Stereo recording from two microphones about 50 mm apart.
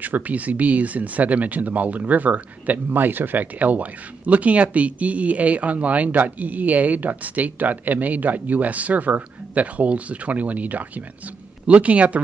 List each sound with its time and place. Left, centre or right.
0.0 s speech: right
2.9 s speech: right